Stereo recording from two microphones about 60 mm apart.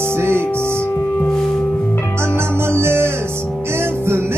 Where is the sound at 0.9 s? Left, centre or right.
Left.